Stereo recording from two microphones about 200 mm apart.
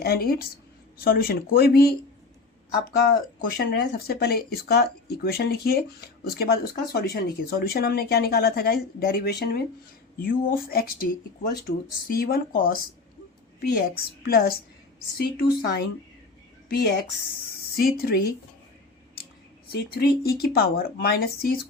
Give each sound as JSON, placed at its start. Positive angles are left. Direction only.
{"t": 0.0, "sound": "speech", "side_deg": 50}
{"t": 3.6, "sound": "a woman's voice", "side_deg": 50}
{"t": 19.7, "sound": "speech", "side_deg": 50}